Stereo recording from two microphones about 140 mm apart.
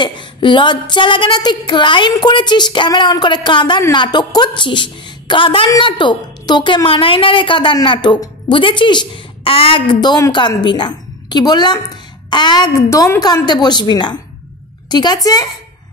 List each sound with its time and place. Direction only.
0.0 s a woman's voice: 35° left (ahead or behind)